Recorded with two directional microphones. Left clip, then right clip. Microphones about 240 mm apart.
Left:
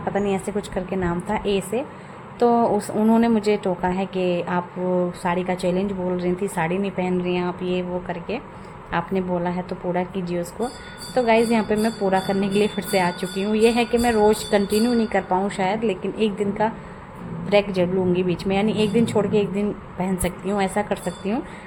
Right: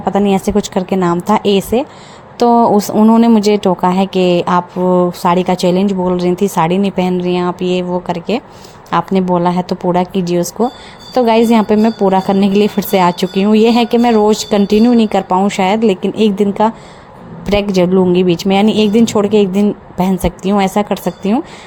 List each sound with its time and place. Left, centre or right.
0.0 s speech: right
17.7 s speech: right